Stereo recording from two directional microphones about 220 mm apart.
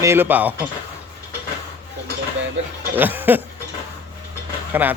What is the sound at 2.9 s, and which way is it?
Speech, 10° right (ahead or behind).